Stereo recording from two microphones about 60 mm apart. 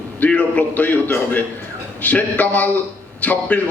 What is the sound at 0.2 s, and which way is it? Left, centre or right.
A man's voice, left.